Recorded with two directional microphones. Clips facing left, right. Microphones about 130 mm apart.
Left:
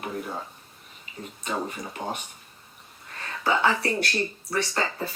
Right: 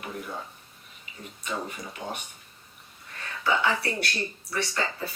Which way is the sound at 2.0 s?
35° left (ahead or behind).